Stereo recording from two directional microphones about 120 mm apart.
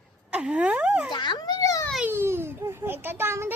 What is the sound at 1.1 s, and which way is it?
Speech, 40° left (ahead or behind).